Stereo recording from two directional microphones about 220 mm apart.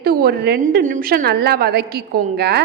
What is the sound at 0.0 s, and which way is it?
A woman's voice, 45° right (ahead or behind).